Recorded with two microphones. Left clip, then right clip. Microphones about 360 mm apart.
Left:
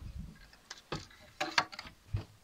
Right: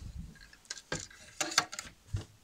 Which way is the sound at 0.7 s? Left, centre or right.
Right.